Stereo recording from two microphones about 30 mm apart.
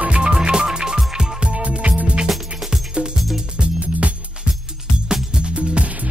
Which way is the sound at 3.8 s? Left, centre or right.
Right.